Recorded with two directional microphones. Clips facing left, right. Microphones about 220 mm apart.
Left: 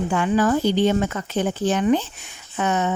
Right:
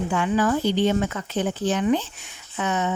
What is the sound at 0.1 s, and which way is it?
Speech, 45° left (ahead or behind).